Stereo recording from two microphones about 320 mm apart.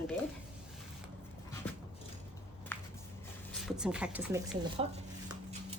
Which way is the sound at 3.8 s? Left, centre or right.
Centre.